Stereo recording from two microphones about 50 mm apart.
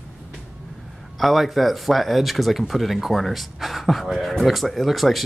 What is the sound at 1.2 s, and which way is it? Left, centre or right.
Speech, centre.